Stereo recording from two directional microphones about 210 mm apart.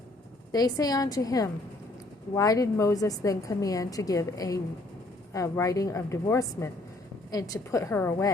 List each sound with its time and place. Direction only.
0.5 s a woman's voice: 20° left (ahead or behind)